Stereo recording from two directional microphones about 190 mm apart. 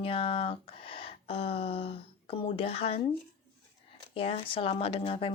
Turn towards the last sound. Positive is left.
turn(degrees=30)  # may be behind; listen again after turning